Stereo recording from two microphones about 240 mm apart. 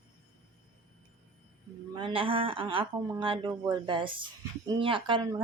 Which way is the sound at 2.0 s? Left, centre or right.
Right.